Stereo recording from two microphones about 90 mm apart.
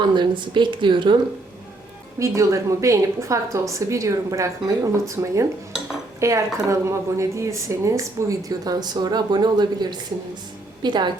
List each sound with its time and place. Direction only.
0.0 s a woman's voice: 60° right (ahead or behind)
2.1 s a woman's voice: 35° right (ahead or behind); by 11.1 s 55° right (ahead or behind)